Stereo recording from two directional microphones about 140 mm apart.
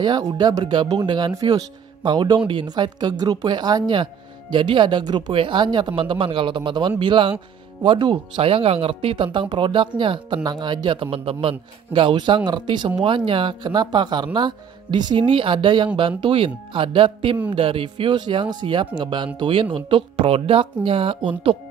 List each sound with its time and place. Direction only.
0.0 s speech: 30° right (ahead or behind)